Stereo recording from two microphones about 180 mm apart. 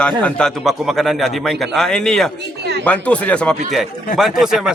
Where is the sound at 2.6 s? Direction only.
65° right (ahead or behind).